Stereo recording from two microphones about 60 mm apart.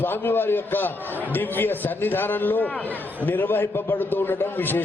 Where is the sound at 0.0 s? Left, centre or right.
Left.